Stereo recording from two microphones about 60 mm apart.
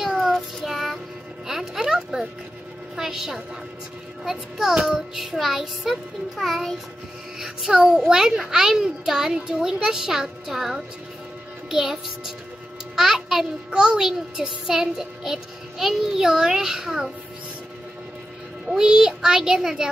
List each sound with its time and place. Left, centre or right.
0.0 s child singing: centre
0.7 s music: centre
3.0 s a child's voice: centre
7.3 s a child's voice: centre
18.7 s a child's voice: centre